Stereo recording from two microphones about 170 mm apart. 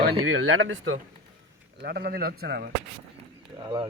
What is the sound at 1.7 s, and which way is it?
Speech, 75° right (ahead or behind).